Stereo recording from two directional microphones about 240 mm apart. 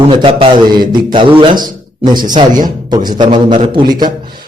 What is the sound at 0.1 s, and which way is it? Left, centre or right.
A man's voice, right.